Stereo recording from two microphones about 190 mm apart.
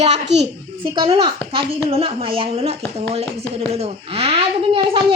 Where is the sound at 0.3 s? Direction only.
65° right (ahead or behind).